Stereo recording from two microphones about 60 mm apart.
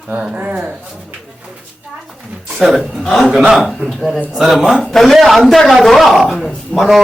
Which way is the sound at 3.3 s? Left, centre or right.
Centre.